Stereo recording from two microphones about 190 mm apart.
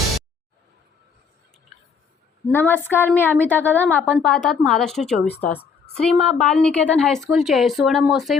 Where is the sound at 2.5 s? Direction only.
10° left (ahead or behind).